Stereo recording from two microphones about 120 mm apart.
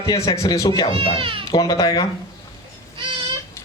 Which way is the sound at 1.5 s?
30° left (ahead or behind).